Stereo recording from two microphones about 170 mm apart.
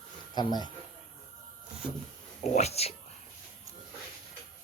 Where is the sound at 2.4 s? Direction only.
40° left (ahead or behind).